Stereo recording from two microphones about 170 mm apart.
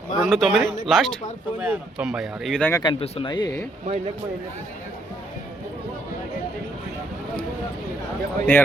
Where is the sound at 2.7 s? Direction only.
20° left (ahead or behind).